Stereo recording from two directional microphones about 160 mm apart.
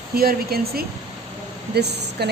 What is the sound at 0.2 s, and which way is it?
Speech, 70° right (ahead or behind).